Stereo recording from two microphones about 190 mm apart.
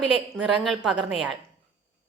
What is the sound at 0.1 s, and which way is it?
A woman's voice, 5° right (ahead or behind).